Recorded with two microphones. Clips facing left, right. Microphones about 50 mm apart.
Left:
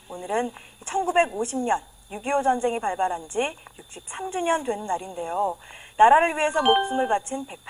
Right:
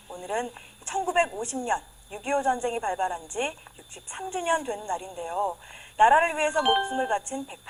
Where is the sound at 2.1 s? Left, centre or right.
Centre.